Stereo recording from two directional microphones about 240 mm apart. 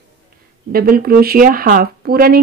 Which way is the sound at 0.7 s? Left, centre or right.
Right.